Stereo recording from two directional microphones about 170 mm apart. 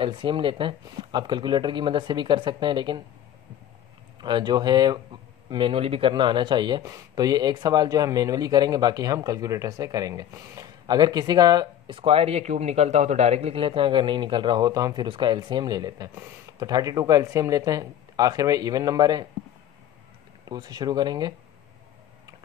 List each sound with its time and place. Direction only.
0.0 s speech: 30° right (ahead or behind)
4.2 s speech: 25° right (ahead or behind)
20.4 s speech: 25° right (ahead or behind)